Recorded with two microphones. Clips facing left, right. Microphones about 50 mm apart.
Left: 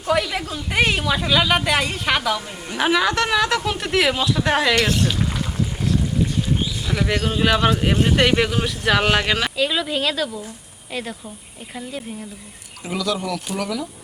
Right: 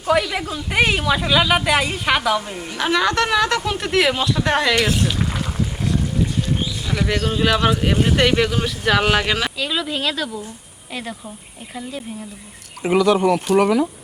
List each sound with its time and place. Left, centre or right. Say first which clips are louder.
0.0 s speech: right 2 dB; centre
2.7 s a woman's voice: even; centre
11.7 s speech: right 1 dB; centre
12.8 s speech: right 9 dB; right